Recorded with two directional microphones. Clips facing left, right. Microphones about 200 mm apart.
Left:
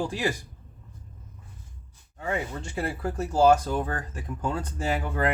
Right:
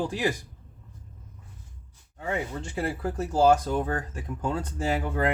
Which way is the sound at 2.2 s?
20° right (ahead or behind).